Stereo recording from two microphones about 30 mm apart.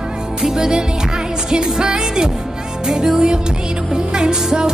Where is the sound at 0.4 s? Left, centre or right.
Right.